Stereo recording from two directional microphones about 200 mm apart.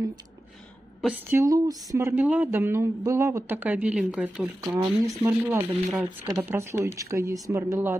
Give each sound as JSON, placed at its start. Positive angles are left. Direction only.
{"t": 1.0, "sound": "speech", "side_deg": -10}
{"t": 4.6, "sound": "speech", "side_deg": -20}